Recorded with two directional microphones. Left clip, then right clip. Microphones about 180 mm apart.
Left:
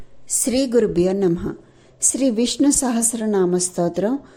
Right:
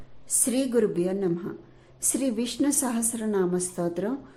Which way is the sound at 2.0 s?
25° left (ahead or behind).